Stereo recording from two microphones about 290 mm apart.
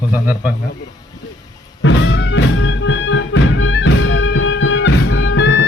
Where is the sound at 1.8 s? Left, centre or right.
Left.